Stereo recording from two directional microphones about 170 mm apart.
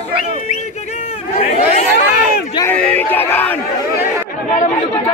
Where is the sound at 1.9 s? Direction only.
65° left (ahead or behind).